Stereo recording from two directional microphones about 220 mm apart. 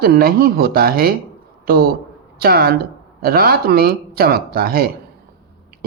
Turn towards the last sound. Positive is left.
turn(degrees=-45)  # may be behind; listen again after turning